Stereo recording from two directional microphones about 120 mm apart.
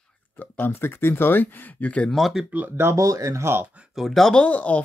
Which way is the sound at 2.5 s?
15° right (ahead or behind).